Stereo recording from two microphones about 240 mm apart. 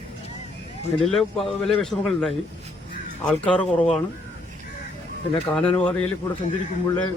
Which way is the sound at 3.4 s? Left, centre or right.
Centre.